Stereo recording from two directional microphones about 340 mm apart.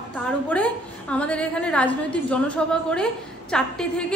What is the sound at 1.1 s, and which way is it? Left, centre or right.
A woman's voice, centre.